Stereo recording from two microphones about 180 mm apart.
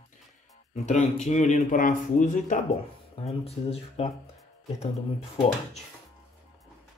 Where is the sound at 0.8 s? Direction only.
40° left (ahead or behind).